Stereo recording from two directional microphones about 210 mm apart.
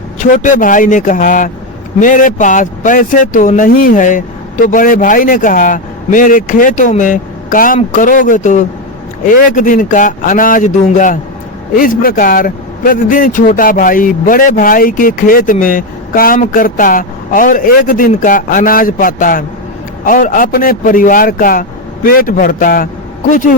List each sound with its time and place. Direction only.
0.2 s a man's voice: 40° left (ahead or behind)